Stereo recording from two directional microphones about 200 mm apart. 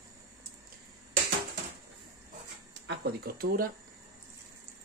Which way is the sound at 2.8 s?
50° right (ahead or behind).